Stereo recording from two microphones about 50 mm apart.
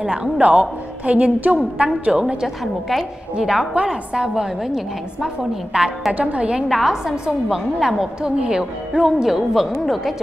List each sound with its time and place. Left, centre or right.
0.1 s a woman's voice: right
2.4 s a woman's voice: centre
6.1 s a woman's voice: right
6.7 s a woman's voice: centre